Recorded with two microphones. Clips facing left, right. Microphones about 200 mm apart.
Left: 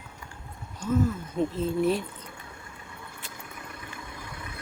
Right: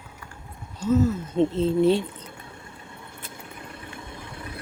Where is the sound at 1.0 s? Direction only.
25° right (ahead or behind).